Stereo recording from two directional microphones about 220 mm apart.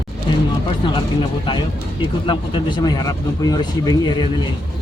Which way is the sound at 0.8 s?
20° left (ahead or behind).